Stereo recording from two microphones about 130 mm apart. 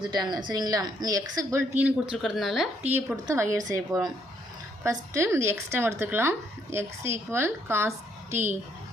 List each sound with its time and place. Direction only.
0.1 s speech: 35° right (ahead or behind); by 2.1 s 15° right (ahead or behind)
2.1 s speech: centre (ahead or behind)
2.8 s speech: 15° right (ahead or behind)